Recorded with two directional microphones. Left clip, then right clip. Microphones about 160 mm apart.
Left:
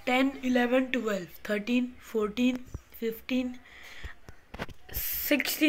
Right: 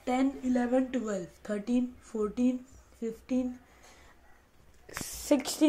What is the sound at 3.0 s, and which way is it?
Speech, 5° right (ahead or behind).